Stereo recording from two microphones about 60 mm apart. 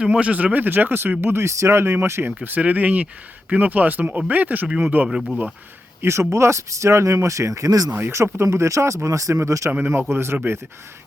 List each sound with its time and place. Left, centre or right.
0.0 s speech: centre; by 1.5 s right
1.5 s speech: right
2.4 s speech: right
5.0 s speech: centre
6.0 s speech: right
7.9 s speech: right
9.3 s speech: right
9.9 s speech: right